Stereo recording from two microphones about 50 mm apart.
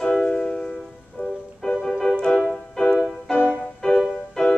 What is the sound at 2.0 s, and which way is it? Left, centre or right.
Music, centre.